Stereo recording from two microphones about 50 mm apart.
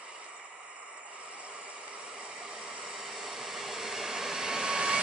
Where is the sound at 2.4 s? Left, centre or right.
Centre.